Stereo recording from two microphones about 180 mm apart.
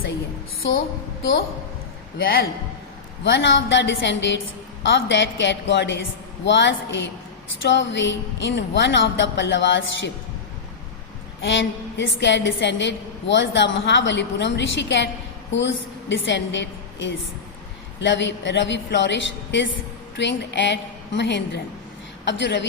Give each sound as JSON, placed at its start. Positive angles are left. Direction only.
{"t": 2.1, "sound": "a man's voice", "side_deg": 55}
{"t": 3.2, "sound": "a woman's voice", "side_deg": 90}
{"t": 11.4, "sound": "a woman's voice", "side_deg": 90}
{"t": 20.1, "sound": "a woman's voice", "side_deg": 75}